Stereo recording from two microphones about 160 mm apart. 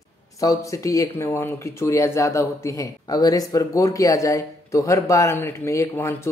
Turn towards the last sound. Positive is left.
turn(degrees=15)  # may be behind; listen again after turning